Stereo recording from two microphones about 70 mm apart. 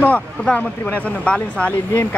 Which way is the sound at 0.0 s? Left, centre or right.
Left.